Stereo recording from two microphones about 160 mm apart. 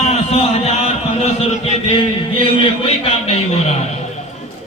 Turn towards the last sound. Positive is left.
turn(degrees=40)  # may be behind; listen again after turning